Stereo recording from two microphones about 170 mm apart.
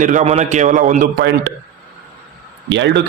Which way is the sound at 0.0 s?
50° right (ahead or behind).